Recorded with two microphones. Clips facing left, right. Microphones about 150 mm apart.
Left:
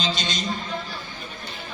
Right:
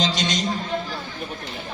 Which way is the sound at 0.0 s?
85° right.